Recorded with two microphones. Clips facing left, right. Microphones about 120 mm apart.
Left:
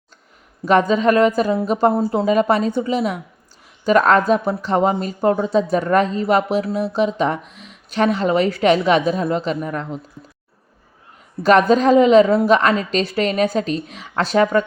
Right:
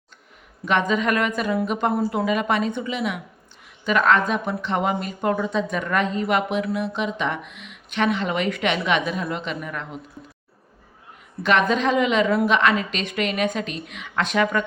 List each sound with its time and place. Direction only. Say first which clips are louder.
0.6 s speech: left 6 dB; 35° left (ahead or behind)
11.4 s speech: left 7 dB; 40° left (ahead or behind)